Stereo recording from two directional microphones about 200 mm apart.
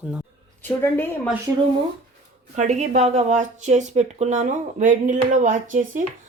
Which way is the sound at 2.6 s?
35° right (ahead or behind).